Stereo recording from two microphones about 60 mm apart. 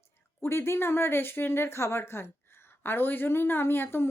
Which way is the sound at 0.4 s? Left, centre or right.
Left.